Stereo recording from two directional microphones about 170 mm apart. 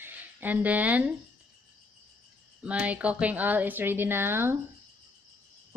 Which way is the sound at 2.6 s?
10° right (ahead or behind).